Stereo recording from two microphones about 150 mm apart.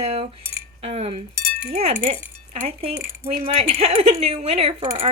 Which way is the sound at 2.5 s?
45° right (ahead or behind).